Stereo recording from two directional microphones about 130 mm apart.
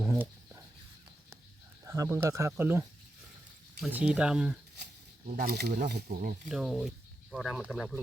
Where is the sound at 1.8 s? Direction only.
25° right (ahead or behind).